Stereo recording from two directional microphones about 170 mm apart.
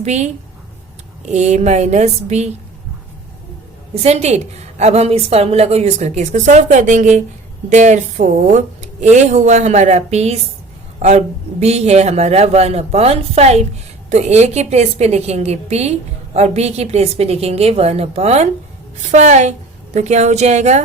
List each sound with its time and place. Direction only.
0.0 s a woman's voice: 40° right (ahead or behind)
4.0 s a woman's voice: 40° right (ahead or behind)